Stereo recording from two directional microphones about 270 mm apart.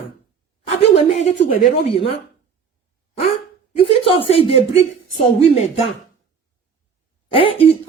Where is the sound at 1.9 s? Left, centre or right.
Left.